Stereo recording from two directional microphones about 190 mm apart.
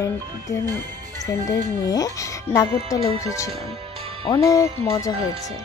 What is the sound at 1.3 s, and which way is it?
A woman's voice, 15° left (ahead or behind).